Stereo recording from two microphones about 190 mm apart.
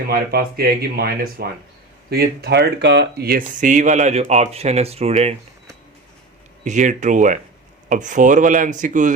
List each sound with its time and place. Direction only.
0.1 s speech: 55° right (ahead or behind); by 5.3 s 35° right (ahead or behind)
6.7 s speech: 40° right (ahead or behind)